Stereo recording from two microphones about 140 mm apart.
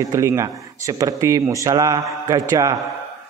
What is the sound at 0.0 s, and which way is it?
A man's voice, 25° right (ahead or behind).